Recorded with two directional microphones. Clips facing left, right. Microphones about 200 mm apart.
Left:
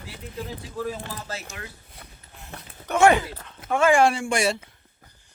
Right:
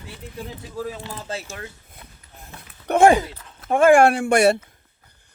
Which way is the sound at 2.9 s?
60° right (ahead or behind).